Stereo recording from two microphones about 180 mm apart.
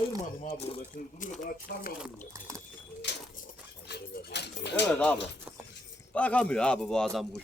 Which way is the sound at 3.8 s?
65° left (ahead or behind).